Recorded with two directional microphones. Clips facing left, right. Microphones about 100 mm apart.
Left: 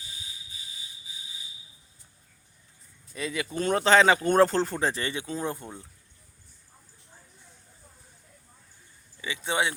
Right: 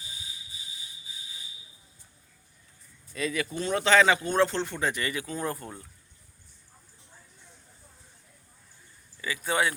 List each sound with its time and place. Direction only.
3.1 s speech: 20° left (ahead or behind)
3.5 s speech: 45° left (ahead or behind); by 5.8 s 20° left (ahead or behind)
9.2 s speech: 25° left (ahead or behind)